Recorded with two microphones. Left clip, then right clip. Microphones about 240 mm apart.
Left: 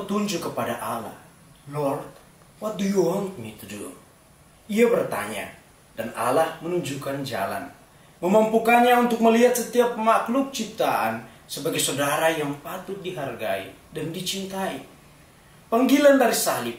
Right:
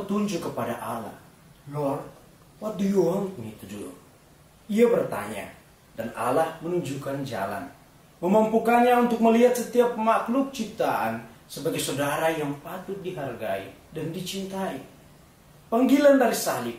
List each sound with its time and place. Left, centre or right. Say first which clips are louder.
0.1 s speech: left 3 dB; centre
4.6 s speech: left 1 dB; centre